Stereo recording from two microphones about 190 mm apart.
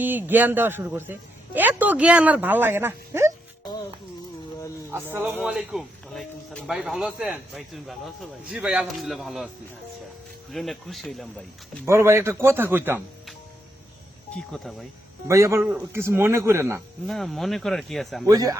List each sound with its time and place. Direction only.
0.0 s speech: 10° right (ahead or behind)
5.1 s speech: 10° right (ahead or behind)
10.5 s speech: centre (ahead or behind)
11.9 s speech: 15° right (ahead or behind)
14.3 s speech: 5° left (ahead or behind)
15.3 s speech: 15° right (ahead or behind)
17.1 s speech: centre (ahead or behind)
18.3 s speech: 20° right (ahead or behind)